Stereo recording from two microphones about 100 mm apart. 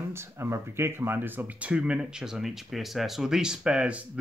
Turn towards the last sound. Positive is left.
turn(degrees=-10)  # may be behind; listen again after turning